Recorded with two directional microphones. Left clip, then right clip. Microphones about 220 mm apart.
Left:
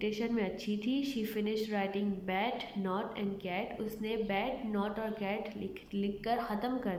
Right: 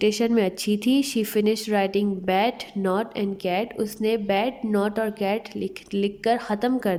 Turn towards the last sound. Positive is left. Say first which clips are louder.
# right 11 dB
turn(degrees=-40)  # may be behind; listen again after turning